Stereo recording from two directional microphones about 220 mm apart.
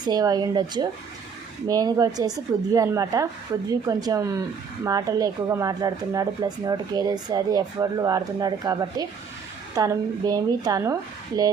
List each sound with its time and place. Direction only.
0.0 s speech: 15° right (ahead or behind)